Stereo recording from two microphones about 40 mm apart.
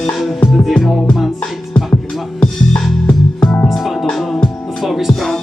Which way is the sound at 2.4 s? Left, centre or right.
Left.